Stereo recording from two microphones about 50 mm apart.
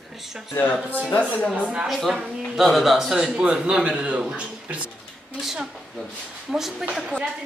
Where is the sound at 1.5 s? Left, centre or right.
Right.